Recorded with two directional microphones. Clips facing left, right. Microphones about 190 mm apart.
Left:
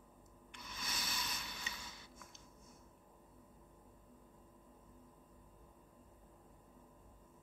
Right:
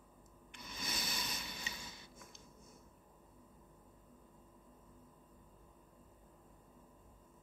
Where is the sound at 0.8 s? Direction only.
15° right (ahead or behind).